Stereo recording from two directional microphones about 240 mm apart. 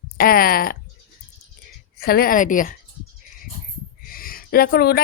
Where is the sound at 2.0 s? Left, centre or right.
Left.